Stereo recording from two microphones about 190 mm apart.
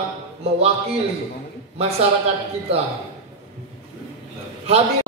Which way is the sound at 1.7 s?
35° right (ahead or behind).